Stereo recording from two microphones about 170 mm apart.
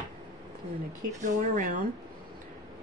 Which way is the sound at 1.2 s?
50° right (ahead or behind).